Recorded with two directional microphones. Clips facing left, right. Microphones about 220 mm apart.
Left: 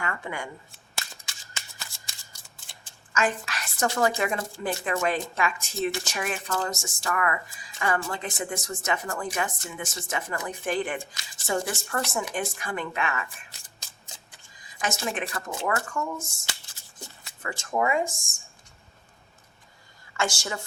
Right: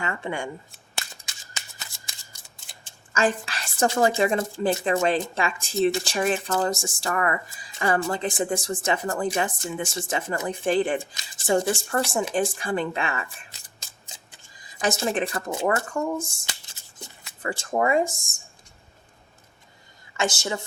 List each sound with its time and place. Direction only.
0.0 s speech: 25° right (ahead or behind)
2.8 s a woman's voice: 30° right (ahead or behind)
14.8 s a woman's voice: 35° right (ahead or behind)
17.4 s a woman's voice: 30° right (ahead or behind)
20.1 s speech: 20° right (ahead or behind)